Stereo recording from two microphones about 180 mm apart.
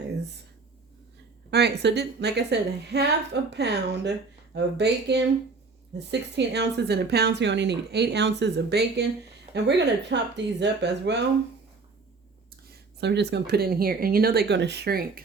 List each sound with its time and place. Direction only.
1.5 s a woman's voice: 65° right (ahead or behind)
13.0 s speech: 70° right (ahead or behind)